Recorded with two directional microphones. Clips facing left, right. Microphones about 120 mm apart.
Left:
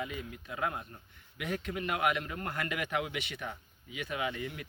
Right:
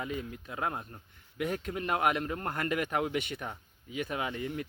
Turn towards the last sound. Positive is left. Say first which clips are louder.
# right 2 dB
turn(degrees=-35)  # may be behind; listen again after turning